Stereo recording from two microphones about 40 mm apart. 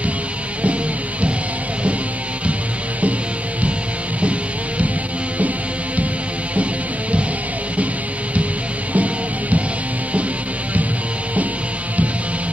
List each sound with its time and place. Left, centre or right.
4.2 s music: right
6.5 s music: right
8.9 s music: right